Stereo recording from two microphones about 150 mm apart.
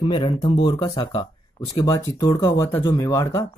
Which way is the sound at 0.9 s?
45° left (ahead or behind).